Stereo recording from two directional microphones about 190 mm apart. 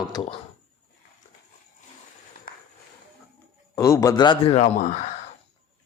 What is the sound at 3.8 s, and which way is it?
A man's voice, 15° left (ahead or behind).